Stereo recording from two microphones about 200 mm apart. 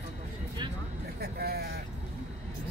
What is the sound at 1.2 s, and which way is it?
Speech, 50° right (ahead or behind).